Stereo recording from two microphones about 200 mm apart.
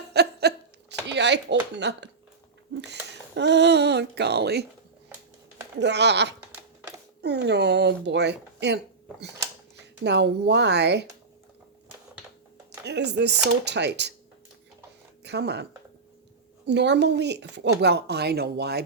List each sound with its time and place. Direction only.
0.1 s a sound: 55° right (ahead or behind)
1.7 s speech: 60° right (ahead or behind)
5.8 s speech: 60° right (ahead or behind)
6.6 s typewriter: 15° right (ahead or behind)
7.2 s speech: 55° right (ahead or behind)
12.8 s speech: 60° right (ahead or behind)
15.2 s speech: 55° right (ahead or behind)
16.6 s speech: 60° right (ahead or behind)